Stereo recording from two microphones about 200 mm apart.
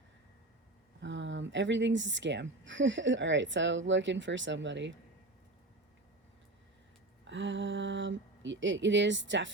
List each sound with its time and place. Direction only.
1.0 s speech: 65° right (ahead or behind)
7.3 s speech: 65° right (ahead or behind)